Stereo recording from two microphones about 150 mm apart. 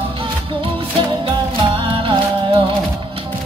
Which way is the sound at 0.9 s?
35° right (ahead or behind).